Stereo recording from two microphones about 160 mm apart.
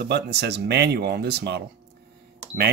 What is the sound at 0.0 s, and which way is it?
Speech, 90° right.